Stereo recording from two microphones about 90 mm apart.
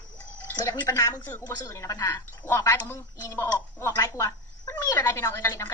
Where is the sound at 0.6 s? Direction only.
35° left (ahead or behind).